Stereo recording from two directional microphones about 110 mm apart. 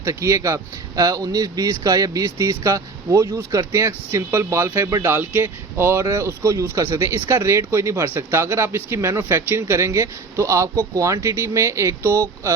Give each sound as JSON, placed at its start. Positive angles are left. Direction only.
{"t": 0.0, "sound": "speech", "side_deg": -25}